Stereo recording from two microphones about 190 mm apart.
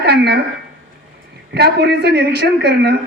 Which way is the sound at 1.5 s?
60° right (ahead or behind).